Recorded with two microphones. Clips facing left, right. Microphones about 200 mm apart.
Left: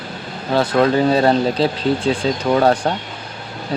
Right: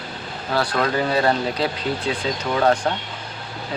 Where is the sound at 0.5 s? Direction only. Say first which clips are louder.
Left 7 dB; 25° left (ahead or behind).